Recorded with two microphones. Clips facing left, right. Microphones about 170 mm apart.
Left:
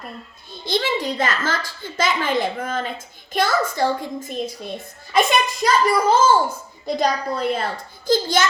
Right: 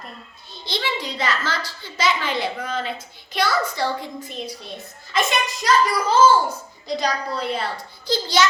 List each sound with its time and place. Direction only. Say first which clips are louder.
0.6 s a child's voice: left 5 dB; 50° left (ahead or behind)